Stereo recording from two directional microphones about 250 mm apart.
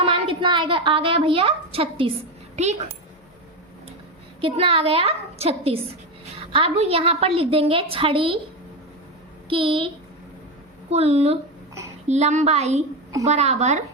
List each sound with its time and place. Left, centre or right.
0.0 s a woman's voice: right
4.4 s a woman's voice: right
9.5 s a woman's voice: right